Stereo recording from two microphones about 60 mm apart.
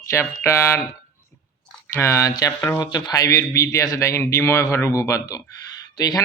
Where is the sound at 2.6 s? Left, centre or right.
Left.